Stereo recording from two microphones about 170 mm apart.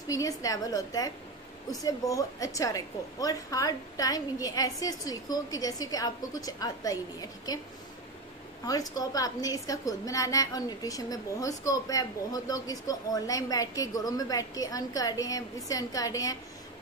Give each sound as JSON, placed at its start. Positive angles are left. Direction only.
{"t": 0.1, "sound": "a woman's voice", "side_deg": 20}
{"t": 8.6, "sound": "a woman's voice", "side_deg": 20}